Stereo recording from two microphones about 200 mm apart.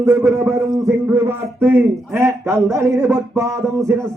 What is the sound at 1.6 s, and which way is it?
A man's voice, 10° right (ahead or behind).